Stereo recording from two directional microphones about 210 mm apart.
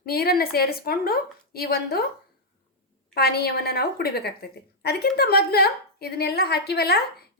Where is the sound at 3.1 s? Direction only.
50° left (ahead or behind).